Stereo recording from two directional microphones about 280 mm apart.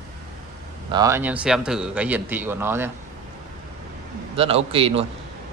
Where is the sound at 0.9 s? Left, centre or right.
Centre.